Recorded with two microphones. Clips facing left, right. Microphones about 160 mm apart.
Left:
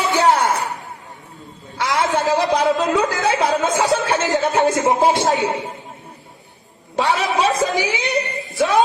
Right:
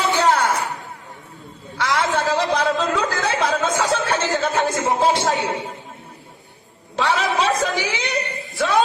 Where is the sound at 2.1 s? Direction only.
15° left (ahead or behind).